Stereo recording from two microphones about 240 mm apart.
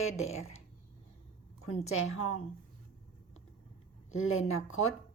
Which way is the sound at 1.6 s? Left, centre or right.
Left.